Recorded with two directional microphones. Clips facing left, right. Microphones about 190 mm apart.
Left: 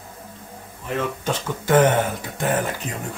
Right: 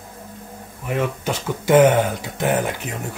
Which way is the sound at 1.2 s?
10° right (ahead or behind).